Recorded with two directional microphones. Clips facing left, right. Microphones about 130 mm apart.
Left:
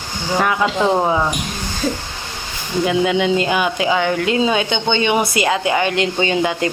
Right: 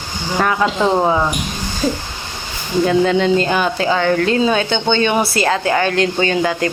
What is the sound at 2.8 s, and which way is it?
Speech, 15° left (ahead or behind).